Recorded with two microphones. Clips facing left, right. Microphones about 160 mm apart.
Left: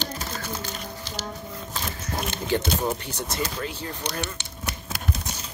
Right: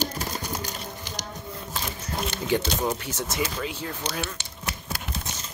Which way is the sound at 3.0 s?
15° left (ahead or behind).